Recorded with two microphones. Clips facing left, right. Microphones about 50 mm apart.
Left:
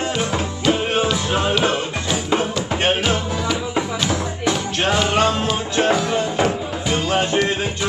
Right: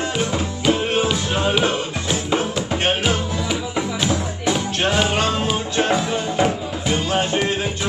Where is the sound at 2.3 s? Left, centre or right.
Centre.